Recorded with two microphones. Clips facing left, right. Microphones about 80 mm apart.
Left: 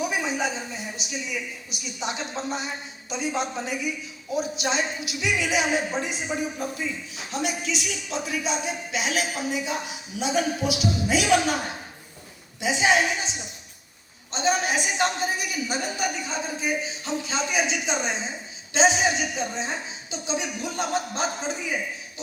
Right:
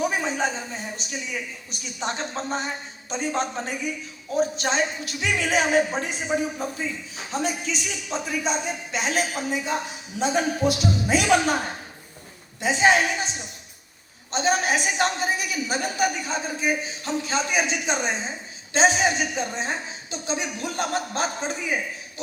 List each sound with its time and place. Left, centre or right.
0.3 s a man's voice: right
7.3 s a man's voice: right
12.5 s a woman's voice: right
14.3 s a woman's voice: right